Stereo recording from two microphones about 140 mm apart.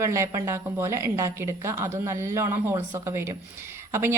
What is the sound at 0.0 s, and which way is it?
A woman's voice, 20° right (ahead or behind).